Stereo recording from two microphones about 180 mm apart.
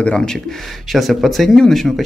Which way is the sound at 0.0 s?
5° left (ahead or behind).